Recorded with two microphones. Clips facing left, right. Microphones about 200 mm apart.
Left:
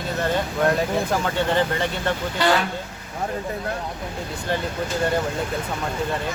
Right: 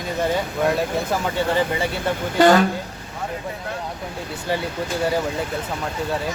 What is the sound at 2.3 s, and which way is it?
Speech, 45° right (ahead or behind).